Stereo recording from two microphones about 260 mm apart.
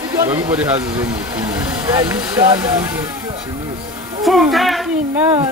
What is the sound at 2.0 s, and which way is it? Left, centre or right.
Speech, centre.